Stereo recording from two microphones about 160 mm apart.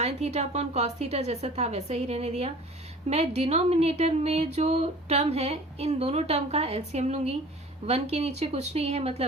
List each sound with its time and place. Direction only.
0.0 s speech: 45° right (ahead or behind)